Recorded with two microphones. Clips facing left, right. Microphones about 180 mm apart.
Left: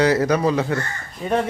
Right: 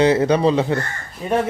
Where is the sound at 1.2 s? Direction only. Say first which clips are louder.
Right 1 dB; centre (ahead or behind).